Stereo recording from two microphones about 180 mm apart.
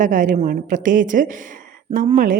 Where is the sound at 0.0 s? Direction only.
45° right (ahead or behind).